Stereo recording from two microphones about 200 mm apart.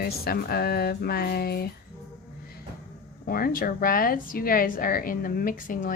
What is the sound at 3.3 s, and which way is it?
A woman's voice, 45° left (ahead or behind).